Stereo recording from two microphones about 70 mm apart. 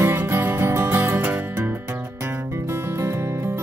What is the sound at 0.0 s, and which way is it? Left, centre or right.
Music, right.